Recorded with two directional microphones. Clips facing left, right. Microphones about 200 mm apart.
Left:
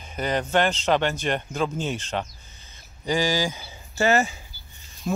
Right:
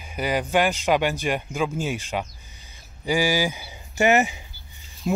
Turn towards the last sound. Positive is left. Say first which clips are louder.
# right 3 dB
turn(degrees=-15)  # may be behind; listen again after turning